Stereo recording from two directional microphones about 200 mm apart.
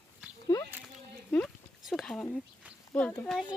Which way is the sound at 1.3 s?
5° left (ahead or behind).